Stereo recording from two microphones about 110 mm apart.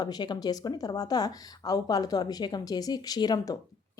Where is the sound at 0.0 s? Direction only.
40° left (ahead or behind).